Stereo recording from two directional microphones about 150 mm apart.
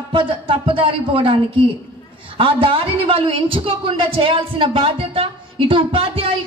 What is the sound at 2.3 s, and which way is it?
A woman's voice, 35° right (ahead or behind).